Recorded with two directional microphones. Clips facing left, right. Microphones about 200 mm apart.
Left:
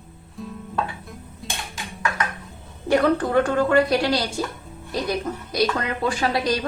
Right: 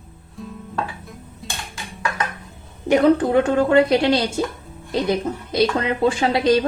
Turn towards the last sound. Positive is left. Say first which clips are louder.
# right 6 dB
turn(degrees=-25)  # may be behind; listen again after turning